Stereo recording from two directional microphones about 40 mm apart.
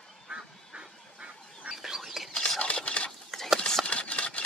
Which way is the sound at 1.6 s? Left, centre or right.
Right.